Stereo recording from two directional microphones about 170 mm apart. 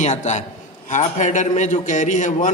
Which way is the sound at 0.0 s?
45° left (ahead or behind).